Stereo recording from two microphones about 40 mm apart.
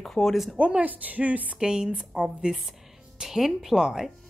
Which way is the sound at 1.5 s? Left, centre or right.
Right.